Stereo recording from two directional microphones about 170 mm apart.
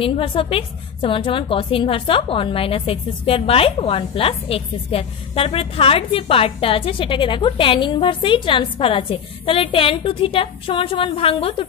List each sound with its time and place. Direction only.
0.0 s a woman's voice: 30° left (ahead or behind)